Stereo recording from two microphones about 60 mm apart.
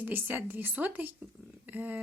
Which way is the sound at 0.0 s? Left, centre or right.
Right.